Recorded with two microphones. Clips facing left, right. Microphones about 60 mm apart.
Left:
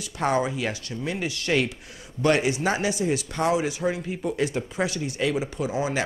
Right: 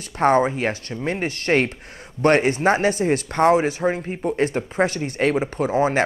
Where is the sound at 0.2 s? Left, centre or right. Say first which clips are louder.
Right 7 dB; right.